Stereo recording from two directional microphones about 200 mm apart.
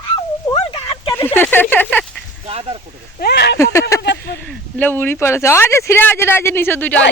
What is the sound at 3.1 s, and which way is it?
Speech, 55° left (ahead or behind).